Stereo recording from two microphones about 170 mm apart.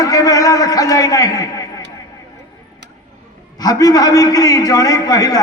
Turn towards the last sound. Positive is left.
turn(degrees=20)  # may be behind; listen again after turning